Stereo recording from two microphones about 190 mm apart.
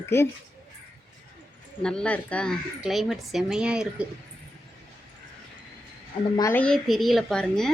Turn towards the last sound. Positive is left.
turn(degrees=5)  # may be behind; listen again after turning